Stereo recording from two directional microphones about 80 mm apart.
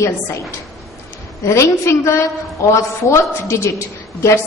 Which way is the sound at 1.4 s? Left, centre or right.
Left.